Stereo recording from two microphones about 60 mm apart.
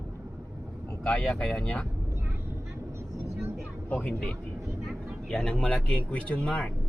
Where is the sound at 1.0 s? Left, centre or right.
Centre.